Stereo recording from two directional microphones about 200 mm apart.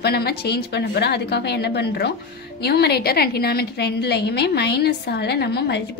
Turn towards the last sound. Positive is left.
turn(degrees=55)  # may be behind; listen again after turning